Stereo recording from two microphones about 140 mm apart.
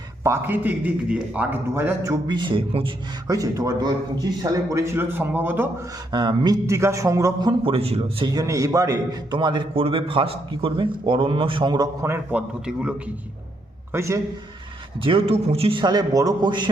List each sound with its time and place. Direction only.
0.2 s a man's voice: 15° right (ahead or behind)
2.2 s a man's voice: 35° right (ahead or behind)
3.3 s speech: 25° right (ahead or behind)
6.1 s speech: 30° right (ahead or behind)
7.6 s a man's voice: 45° right (ahead or behind)
8.3 s a man's voice: 25° right (ahead or behind)
12.0 s a man's voice: 15° right (ahead or behind)
13.9 s speech: 20° right (ahead or behind)
15.0 s a man's voice: 45° right (ahead or behind)
15.8 s speech: 30° right (ahead or behind)